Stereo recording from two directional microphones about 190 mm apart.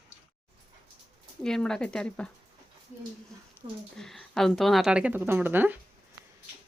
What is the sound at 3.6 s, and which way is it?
Speech, 25° right (ahead or behind).